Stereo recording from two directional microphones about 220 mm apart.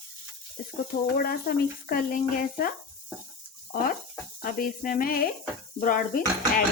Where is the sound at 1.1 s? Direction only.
40° left (ahead or behind).